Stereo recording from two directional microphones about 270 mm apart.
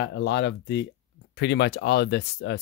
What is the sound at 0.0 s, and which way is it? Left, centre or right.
Speech, left.